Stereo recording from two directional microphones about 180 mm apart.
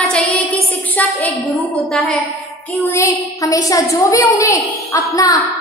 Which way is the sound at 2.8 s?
15° left (ahead or behind).